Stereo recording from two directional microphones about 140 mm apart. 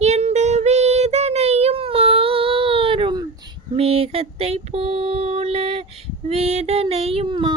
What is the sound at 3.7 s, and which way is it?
Mantra, 45° right (ahead or behind).